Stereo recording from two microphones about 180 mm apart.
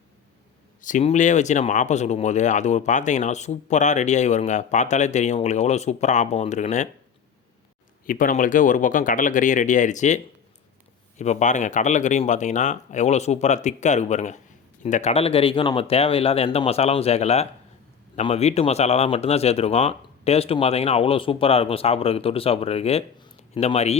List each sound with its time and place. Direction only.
0.8 s speech: 45° left (ahead or behind)
8.0 s speech: 50° left (ahead or behind)
11.2 s speech: 40° left (ahead or behind)